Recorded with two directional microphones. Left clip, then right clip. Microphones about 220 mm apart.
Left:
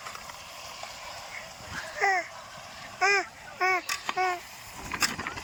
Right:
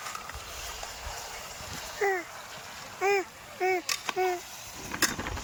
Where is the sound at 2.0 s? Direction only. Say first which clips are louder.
Left 3 dB; 15° right (ahead or behind).